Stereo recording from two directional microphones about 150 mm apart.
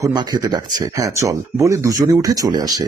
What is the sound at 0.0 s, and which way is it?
Speech, 25° right (ahead or behind).